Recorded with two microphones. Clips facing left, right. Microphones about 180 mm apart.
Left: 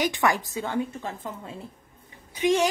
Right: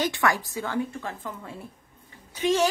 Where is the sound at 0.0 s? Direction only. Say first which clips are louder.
Left 1 dB; 20° left (ahead or behind).